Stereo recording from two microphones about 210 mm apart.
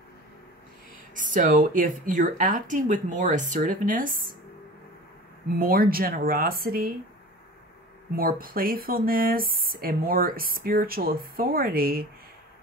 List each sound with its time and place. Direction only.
1.1 s speech: 40° right (ahead or behind)
5.5 s speech: 45° right (ahead or behind)
8.2 s speech: 45° right (ahead or behind)